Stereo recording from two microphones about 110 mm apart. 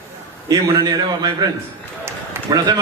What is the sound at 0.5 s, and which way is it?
Speech, 35° right (ahead or behind).